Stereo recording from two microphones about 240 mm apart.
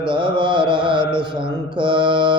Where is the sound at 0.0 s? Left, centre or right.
Centre.